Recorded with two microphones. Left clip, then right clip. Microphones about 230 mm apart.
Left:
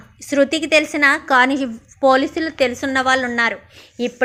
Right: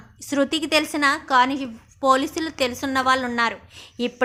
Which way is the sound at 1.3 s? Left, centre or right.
Centre.